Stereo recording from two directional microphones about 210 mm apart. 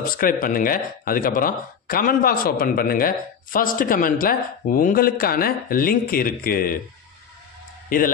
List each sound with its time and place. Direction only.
0.2 s speech: 40° left (ahead or behind)
7.9 s a man's voice: 40° left (ahead or behind)